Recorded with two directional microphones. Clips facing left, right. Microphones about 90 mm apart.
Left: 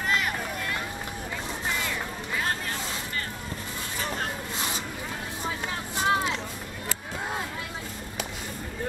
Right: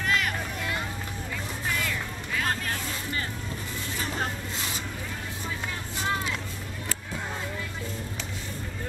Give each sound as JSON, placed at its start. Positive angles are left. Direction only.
{"t": 0.0, "sound": "vehicle", "side_deg": 5}
{"t": 1.7, "sound": "music", "side_deg": 20}
{"t": 6.0, "sound": "vehicle", "side_deg": 20}